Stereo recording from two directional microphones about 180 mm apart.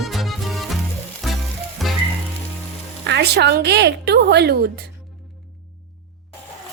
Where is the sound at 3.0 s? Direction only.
65° right (ahead or behind).